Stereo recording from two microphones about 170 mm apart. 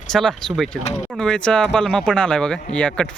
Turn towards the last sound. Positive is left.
turn(degrees=5)  # may be behind; listen again after turning